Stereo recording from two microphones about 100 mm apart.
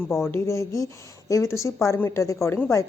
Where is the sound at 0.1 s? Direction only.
25° left (ahead or behind).